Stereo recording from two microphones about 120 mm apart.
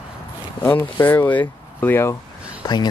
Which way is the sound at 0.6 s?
15° left (ahead or behind).